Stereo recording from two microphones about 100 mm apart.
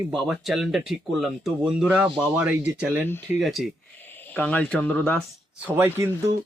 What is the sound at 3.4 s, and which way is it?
Speech, centre (ahead or behind).